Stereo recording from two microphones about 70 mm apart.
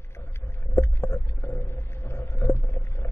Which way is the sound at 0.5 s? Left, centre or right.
Left.